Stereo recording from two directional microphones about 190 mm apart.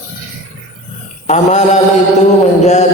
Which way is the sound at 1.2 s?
40° left (ahead or behind).